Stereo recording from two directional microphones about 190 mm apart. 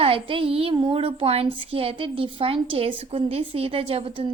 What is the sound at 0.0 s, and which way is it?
Speech, 30° right (ahead or behind).